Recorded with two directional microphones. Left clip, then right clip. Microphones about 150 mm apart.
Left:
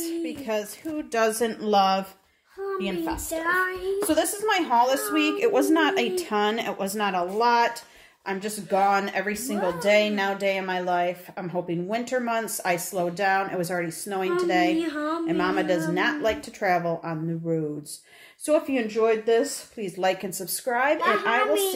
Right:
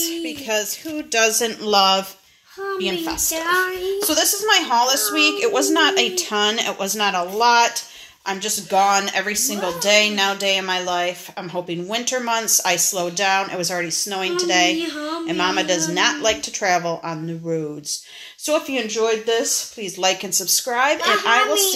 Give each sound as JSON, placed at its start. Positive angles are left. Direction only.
{"t": 0.0, "sound": "speech", "side_deg": 0}
{"t": 3.3, "sound": "child singing", "side_deg": -30}
{"t": 4.1, "sound": "a child's voice", "side_deg": 0}
{"t": 14.8, "sound": "a child's voice", "side_deg": -20}
{"t": 15.2, "sound": "speech", "side_deg": -5}